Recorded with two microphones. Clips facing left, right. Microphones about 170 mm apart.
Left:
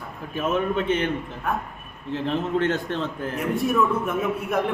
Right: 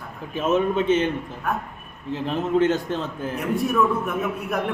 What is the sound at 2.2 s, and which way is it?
Speech, 15° right (ahead or behind).